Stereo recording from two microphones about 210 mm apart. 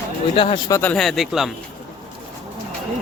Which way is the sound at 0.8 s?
5° left (ahead or behind).